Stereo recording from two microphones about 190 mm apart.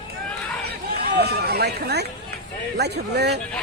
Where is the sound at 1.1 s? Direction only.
60° right (ahead or behind).